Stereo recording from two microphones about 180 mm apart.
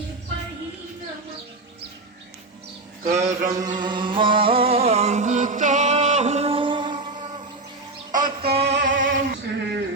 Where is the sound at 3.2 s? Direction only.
40° right (ahead or behind).